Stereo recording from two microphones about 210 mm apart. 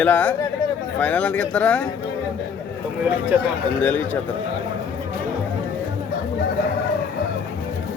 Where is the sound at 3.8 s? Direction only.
10° left (ahead or behind).